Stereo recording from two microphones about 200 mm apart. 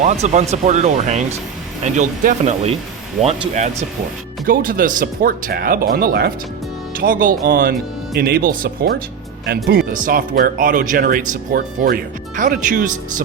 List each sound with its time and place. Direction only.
0.0 s speech: 35° right (ahead or behind)